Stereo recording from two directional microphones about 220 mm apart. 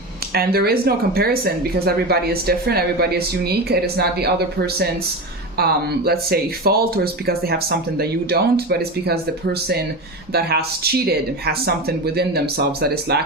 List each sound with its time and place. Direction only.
0.3 s speech: 45° right (ahead or behind)